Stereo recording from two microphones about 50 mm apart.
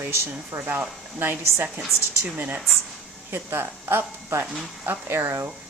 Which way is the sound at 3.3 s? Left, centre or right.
Right.